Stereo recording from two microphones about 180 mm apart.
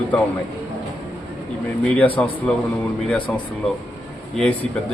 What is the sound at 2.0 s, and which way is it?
Speech, 10° left (ahead or behind).